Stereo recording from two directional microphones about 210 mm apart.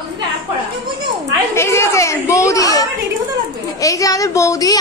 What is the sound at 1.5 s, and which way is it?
A woman's voice, 10° left (ahead or behind).